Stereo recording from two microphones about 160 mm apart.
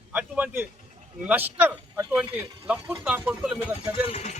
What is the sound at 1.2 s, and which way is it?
Speech, 10° right (ahead or behind).